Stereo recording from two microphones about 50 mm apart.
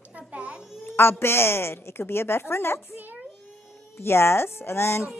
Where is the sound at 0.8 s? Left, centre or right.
Left.